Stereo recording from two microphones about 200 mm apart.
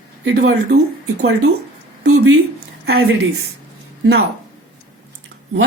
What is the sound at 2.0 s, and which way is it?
Speech, 90° right.